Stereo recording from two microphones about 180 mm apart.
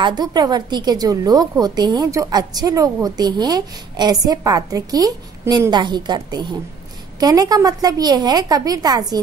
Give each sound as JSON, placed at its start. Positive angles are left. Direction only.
{"t": 0.0, "sound": "a woman's voice", "side_deg": -25}